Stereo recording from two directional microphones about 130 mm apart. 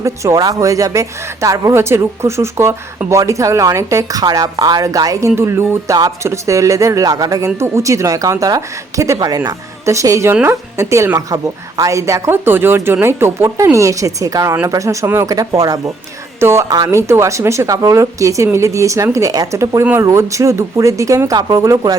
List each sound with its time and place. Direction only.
0.0 s a woman's voice: 25° right (ahead or behind)